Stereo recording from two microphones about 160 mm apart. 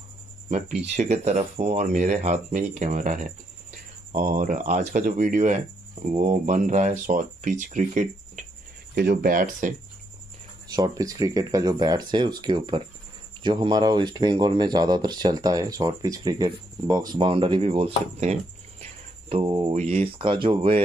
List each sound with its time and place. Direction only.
0.5 s speech: 45° right (ahead or behind)
8.9 s speech: 65° right (ahead or behind)
10.7 s speech: 25° right (ahead or behind)
19.7 s speech: 45° right (ahead or behind)